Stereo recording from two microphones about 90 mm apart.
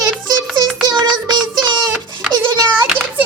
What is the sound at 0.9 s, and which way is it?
Music, 50° right (ahead or behind).